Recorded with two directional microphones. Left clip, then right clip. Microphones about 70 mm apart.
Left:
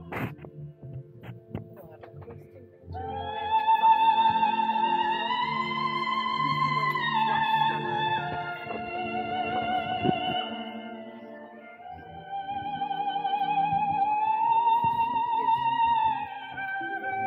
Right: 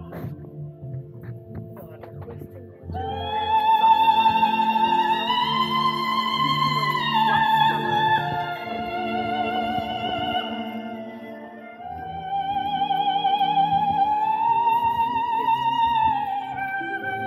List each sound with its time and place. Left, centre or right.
2.9 s music: right
12.6 s music: right
16.2 s music: right